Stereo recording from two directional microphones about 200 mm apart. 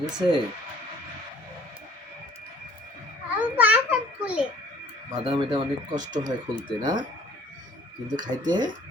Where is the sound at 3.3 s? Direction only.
10° right (ahead or behind).